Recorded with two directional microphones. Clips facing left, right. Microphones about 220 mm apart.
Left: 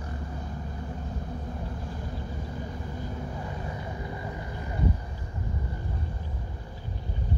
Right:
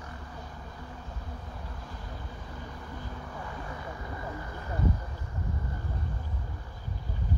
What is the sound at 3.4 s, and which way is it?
Vehicle, 20° left (ahead or behind).